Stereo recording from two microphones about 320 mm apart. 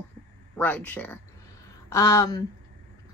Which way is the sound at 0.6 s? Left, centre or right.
Centre.